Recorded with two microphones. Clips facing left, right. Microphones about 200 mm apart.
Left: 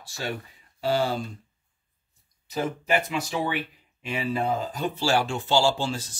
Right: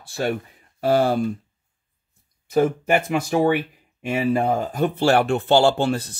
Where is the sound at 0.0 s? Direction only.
55° right (ahead or behind).